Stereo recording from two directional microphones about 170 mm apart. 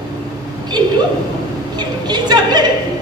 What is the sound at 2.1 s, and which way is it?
Speech, 25° right (ahead or behind).